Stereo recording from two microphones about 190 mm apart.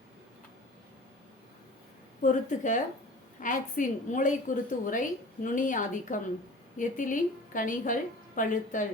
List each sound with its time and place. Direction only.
2.2 s a woman's voice: 40° left (ahead or behind)